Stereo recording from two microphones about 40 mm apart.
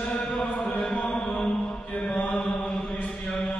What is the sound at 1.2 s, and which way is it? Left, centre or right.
Mantra, left.